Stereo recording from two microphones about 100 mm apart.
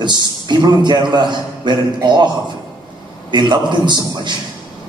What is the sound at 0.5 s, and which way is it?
A man's voice, 50° right (ahead or behind).